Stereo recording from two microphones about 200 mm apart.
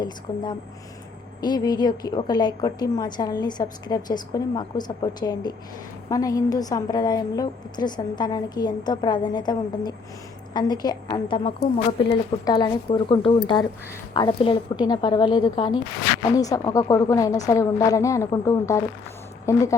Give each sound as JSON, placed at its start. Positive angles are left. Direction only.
{"t": 0.3, "sound": "a woman's voice", "side_deg": 20}